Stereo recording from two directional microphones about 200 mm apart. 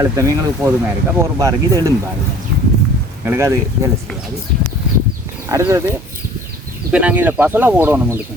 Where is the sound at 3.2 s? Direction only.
10° right (ahead or behind).